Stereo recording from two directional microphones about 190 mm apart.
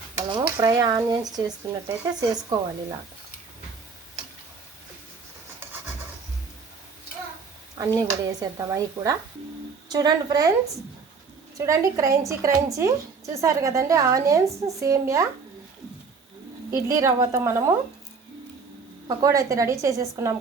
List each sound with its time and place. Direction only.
0.4 s speech: 15° right (ahead or behind)
7.8 s a woman's voice: 20° right (ahead or behind)
11.5 s a woman's voice: 15° right (ahead or behind)
16.7 s a woman's voice: 15° right (ahead or behind)
19.0 s a woman's voice: 20° right (ahead or behind)